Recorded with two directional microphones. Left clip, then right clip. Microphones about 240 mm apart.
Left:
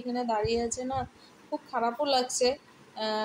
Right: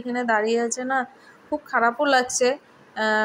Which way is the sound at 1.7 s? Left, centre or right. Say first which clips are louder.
Right 8 dB; centre.